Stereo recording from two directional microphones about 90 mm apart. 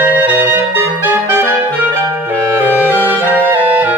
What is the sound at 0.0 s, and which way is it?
Clarinet, 20° right (ahead or behind).